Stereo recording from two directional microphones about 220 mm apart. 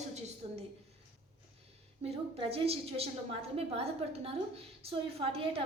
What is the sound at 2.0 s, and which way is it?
A woman's voice, 25° right (ahead or behind).